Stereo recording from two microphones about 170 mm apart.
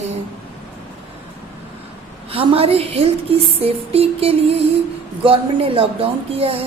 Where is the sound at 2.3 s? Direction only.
35° right (ahead or behind).